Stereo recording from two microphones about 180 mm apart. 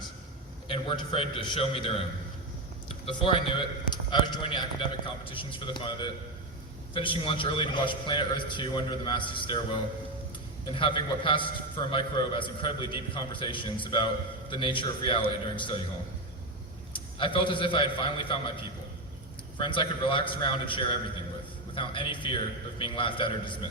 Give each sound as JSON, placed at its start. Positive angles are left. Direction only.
{"t": 0.7, "sound": "a man's voice", "side_deg": 30}
{"t": 10.8, "sound": "a man's voice", "side_deg": 25}
{"t": 16.9, "sound": "a man's voice", "side_deg": 30}
{"t": 19.5, "sound": "a man's voice", "side_deg": 30}